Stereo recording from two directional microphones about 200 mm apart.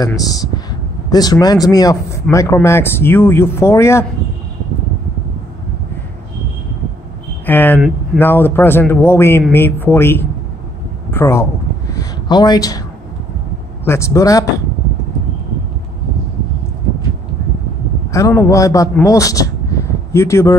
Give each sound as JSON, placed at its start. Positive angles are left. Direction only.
{"t": 1.1, "sound": "speech", "side_deg": 20}
{"t": 7.4, "sound": "speech", "side_deg": 10}
{"t": 11.9, "sound": "a sound", "side_deg": 20}
{"t": 13.8, "sound": "speech", "side_deg": 15}
{"t": 18.1, "sound": "speech", "side_deg": 15}